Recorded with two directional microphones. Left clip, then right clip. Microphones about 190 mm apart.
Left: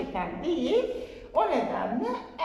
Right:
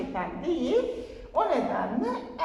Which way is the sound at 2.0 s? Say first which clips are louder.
Right 1 dB; 10° left (ahead or behind).